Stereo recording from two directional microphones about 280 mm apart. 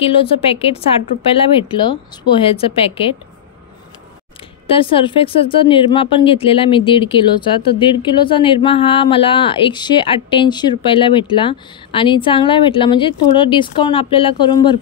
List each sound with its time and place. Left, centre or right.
0.0 s speech: centre
4.6 s speech: centre